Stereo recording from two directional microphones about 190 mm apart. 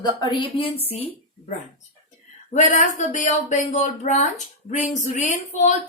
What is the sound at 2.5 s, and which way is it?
Speech, 40° left (ahead or behind).